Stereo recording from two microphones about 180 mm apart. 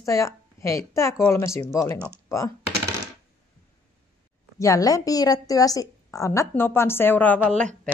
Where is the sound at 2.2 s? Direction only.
15° left (ahead or behind).